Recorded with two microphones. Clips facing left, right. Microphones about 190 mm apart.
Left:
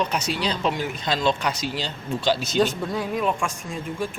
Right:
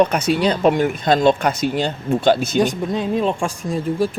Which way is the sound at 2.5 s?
20° right (ahead or behind).